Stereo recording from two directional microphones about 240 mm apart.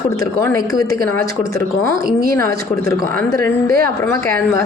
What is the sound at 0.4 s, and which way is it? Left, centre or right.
A man's voice, centre.